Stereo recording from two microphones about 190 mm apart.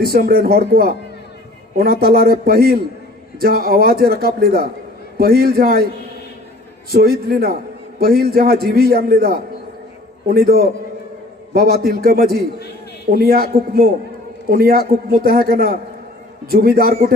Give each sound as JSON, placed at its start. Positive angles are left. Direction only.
{"t": 0.0, "sound": "a man's voice", "side_deg": -55}
{"t": 6.9, "sound": "a man's voice", "side_deg": -55}